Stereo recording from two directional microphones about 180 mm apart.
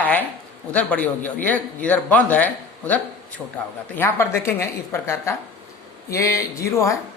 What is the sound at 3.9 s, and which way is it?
Speech, 10° left (ahead or behind).